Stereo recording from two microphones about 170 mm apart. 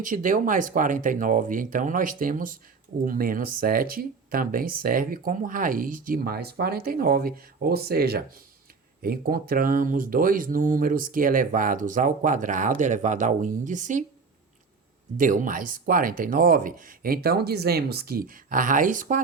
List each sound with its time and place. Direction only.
0.0 s speech: 50° right (ahead or behind)
15.2 s speech: 55° right (ahead or behind)